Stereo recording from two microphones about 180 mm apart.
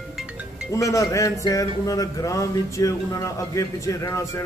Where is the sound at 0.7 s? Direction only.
20° left (ahead or behind).